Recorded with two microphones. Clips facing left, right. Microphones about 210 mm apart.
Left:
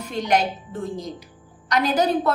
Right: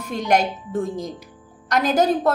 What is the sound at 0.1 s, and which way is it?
A woman's voice, 45° right (ahead or behind).